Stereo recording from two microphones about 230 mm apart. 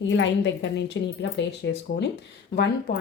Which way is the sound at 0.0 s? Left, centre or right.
Left.